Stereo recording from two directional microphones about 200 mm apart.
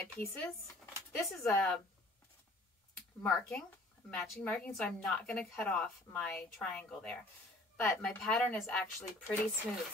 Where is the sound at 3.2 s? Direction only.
5° left (ahead or behind).